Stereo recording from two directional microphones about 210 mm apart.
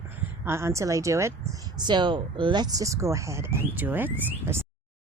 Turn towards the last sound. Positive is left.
turn(degrees=-10)  # may be behind; listen again after turning